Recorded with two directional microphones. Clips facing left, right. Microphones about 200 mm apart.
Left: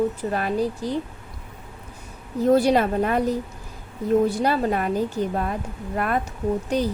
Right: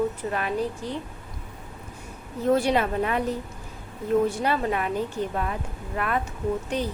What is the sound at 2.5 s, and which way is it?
Speech, 40° left (ahead or behind).